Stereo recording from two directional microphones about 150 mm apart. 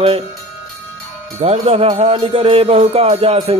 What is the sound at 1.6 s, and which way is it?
Music, 40° right (ahead or behind).